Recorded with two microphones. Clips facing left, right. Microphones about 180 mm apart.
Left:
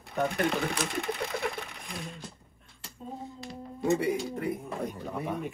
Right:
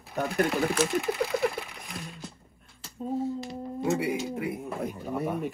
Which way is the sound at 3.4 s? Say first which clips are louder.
Right 3 dB; centre (ahead or behind).